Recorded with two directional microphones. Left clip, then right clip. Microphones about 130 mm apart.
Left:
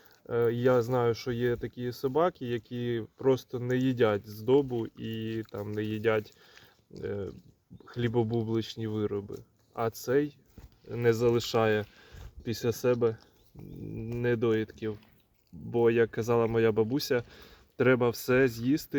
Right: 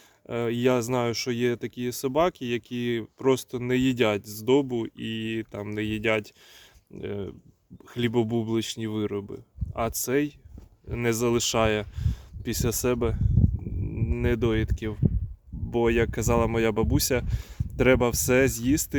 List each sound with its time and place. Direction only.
0.3 s speech: 40° right (ahead or behind)